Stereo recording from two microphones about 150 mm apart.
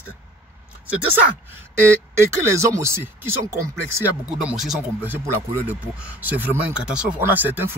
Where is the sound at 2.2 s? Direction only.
20° right (ahead or behind).